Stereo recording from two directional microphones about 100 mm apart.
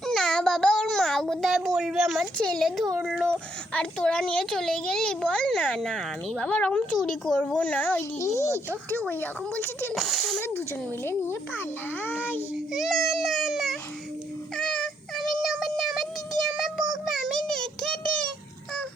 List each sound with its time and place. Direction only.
0.0 s a sound: 5° left (ahead or behind)
2.6 s speech: centre (ahead or behind)
3.7 s a child's voice: 10° left (ahead or behind)
8.2 s a child's voice: 25° left (ahead or behind)
8.4 s speech: 25° right (ahead or behind)
9.9 s speech: centre (ahead or behind)
11.0 s a child's voice: 25° left (ahead or behind)
12.7 s speech: centre (ahead or behind)
14.5 s child singing: 5° left (ahead or behind)